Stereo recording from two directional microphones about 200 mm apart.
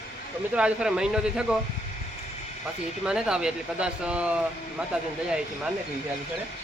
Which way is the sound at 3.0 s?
5° right (ahead or behind).